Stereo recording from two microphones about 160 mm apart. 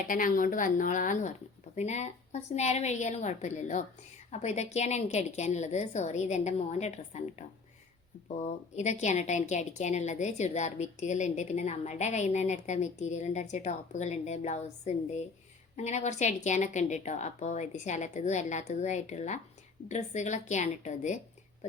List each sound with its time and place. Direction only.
0.1 s a woman's voice: 55° left (ahead or behind)